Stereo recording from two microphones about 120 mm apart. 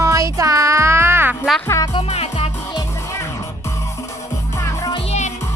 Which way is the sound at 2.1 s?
55° left (ahead or behind).